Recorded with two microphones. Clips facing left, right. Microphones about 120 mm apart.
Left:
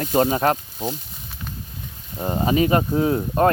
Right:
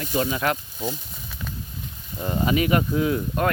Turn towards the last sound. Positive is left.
turn(degrees=35)  # may be behind; listen again after turning